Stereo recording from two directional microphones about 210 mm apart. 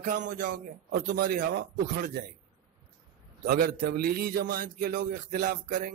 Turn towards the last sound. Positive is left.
turn(degrees=-40)  # may be behind; listen again after turning